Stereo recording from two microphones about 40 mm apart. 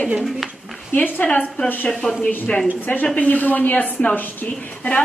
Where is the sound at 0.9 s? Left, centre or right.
Left.